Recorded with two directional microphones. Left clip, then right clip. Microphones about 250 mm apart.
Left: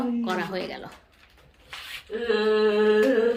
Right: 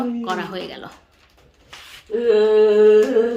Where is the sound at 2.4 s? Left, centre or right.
Right.